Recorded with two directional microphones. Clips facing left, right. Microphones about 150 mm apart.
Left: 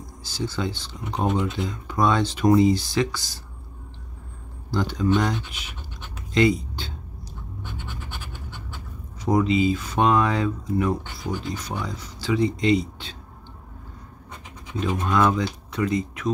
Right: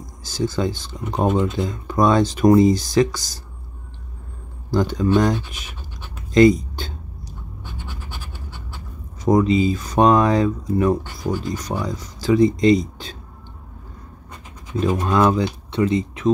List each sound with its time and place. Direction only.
0.2 s speech: 45° right (ahead or behind)
4.6 s speech: 45° right (ahead or behind)
6.3 s a sound: 40° right (ahead or behind)
7.7 s scratch: 10° right (ahead or behind)
9.2 s speech: 45° right (ahead or behind)
14.8 s speech: 40° right (ahead or behind); by 16.3 s 25° right (ahead or behind)